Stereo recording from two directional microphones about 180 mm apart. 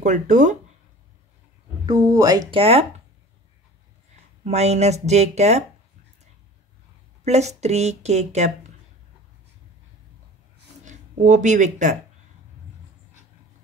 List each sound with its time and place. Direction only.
0.0 s speech: 40° right (ahead or behind)
1.9 s speech: 20° right (ahead or behind)
2.6 s a woman's voice: 35° right (ahead or behind)
4.5 s a woman's voice: 40° right (ahead or behind)
7.2 s a woman's voice: 40° right (ahead or behind)
10.9 s speech: 45° right (ahead or behind)